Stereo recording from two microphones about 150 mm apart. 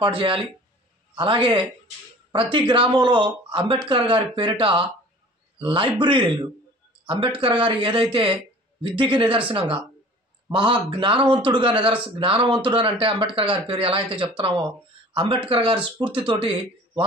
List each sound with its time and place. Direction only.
0.0 s speech: 35° right (ahead or behind)